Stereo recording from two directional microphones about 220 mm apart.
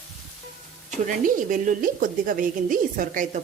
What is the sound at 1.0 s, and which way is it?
A woman's voice, 35° right (ahead or behind).